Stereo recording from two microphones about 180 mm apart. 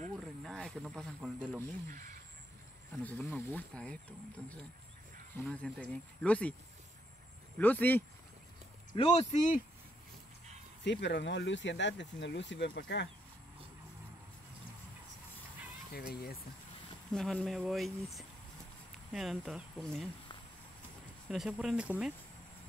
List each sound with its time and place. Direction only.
0.4 s a sound: centre (ahead or behind)
1.4 s speech: 5° left (ahead or behind)
1.9 s speech: 50° right (ahead or behind)
3.0 s speech: 10° left (ahead or behind)
5.4 s speech: 10° left (ahead or behind)
7.5 s speech: 10° left (ahead or behind)
8.9 s speech: 35° left (ahead or behind)
10.8 s speech: 75° left (ahead or behind)
15.9 s speech: 55° left (ahead or behind)
17.1 s speech: 5° left (ahead or behind)
21.3 s speech: centre (ahead or behind)